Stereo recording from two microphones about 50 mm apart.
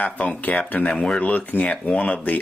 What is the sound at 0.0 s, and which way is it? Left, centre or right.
Speech, left.